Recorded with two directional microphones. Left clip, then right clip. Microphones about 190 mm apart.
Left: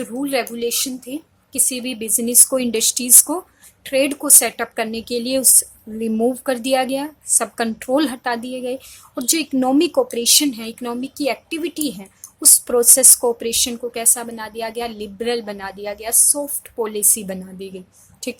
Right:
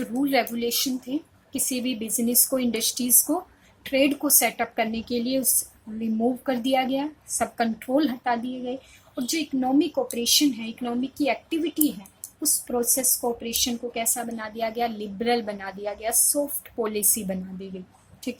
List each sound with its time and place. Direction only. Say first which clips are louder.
0.0 s a woman's voice: left 2 dB; 25° left (ahead or behind); by 14.0 s 45° left (ahead or behind)
14.0 s a woman's voice: left 6 dB; 35° left (ahead or behind)